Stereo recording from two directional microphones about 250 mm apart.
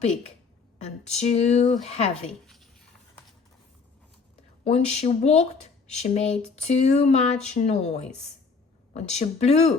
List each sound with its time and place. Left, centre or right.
0.9 s speech: left
4.6 s speech: left